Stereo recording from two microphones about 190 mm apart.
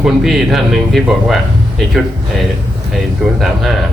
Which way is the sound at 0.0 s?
Centre (ahead or behind).